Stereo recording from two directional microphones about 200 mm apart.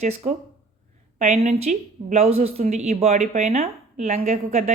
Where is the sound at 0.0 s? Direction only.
35° right (ahead or behind).